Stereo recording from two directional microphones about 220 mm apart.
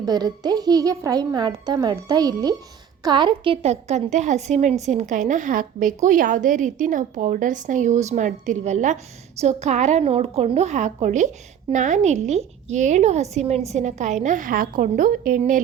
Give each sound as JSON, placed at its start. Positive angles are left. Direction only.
{"t": 0.0, "sound": "a child's voice", "side_deg": -15}